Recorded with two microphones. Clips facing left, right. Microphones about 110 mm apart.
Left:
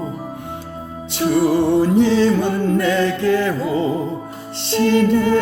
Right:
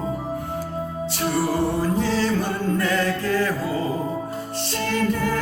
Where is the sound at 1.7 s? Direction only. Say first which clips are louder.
Left 8 dB; 25° left (ahead or behind).